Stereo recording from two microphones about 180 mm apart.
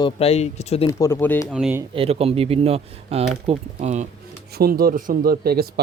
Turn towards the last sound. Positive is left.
turn(degrees=-60)  # may be behind; listen again after turning